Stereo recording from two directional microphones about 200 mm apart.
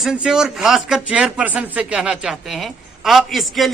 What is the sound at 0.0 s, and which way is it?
A man's voice, 5° right (ahead or behind).